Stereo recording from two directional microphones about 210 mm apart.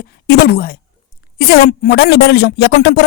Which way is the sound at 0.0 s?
45° left (ahead or behind).